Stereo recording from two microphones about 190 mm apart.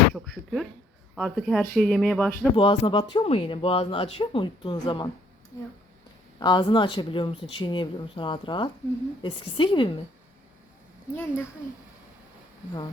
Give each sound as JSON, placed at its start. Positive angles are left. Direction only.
{"t": 0.1, "sound": "speech", "side_deg": 0}
{"t": 2.6, "sound": "speech", "side_deg": 25}
{"t": 6.4, "sound": "speech", "side_deg": 25}
{"t": 11.1, "sound": "speech", "side_deg": 10}